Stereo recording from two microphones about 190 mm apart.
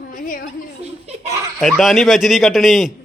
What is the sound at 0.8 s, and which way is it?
Laughter, 35° right (ahead or behind).